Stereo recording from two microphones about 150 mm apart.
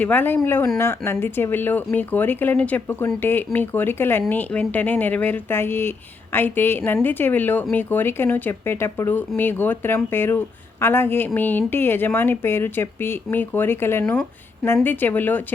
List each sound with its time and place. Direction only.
0.0 s a woman's voice: 10° left (ahead or behind)
14.0 s a woman's voice: 5° left (ahead or behind)